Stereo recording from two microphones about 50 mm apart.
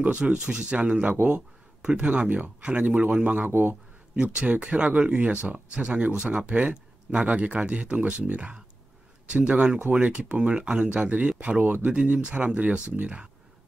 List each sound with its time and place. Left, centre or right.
0.4 s speech: centre
2.2 s speech: right
2.6 s speech: centre
3.4 s speech: right
4.1 s speech: centre